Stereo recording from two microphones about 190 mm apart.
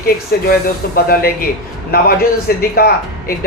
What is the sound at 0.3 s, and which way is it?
Speech, 50° left (ahead or behind).